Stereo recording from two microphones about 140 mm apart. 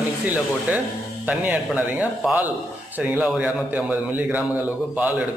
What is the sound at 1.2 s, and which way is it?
A man's voice, 10° right (ahead or behind).